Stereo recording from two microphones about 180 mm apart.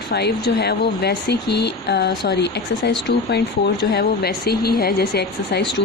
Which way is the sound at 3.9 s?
60° left (ahead or behind).